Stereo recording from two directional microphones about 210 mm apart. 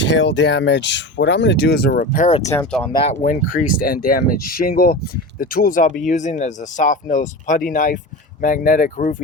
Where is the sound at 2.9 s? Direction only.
30° left (ahead or behind).